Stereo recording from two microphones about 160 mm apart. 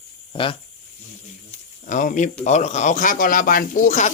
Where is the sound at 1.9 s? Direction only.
50° left (ahead or behind).